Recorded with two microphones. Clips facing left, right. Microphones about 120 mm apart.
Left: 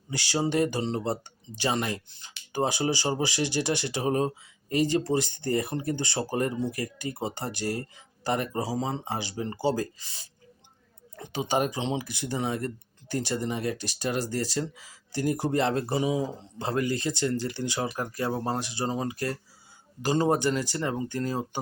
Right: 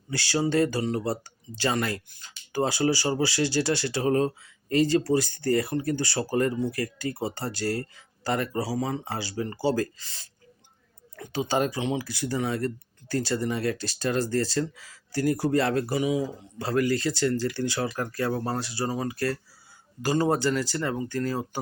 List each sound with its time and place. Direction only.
0.1 s speech: 15° left (ahead or behind)